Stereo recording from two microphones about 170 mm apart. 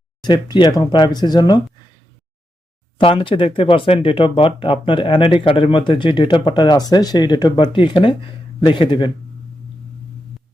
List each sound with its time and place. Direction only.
0.2 s speech: 25° left (ahead or behind)
3.0 s speech: 30° left (ahead or behind)